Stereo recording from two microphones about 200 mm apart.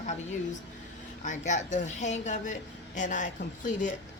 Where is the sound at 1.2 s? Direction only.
40° left (ahead or behind).